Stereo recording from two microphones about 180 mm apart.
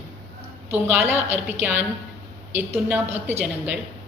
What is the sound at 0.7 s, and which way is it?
A woman's voice, 10° right (ahead or behind).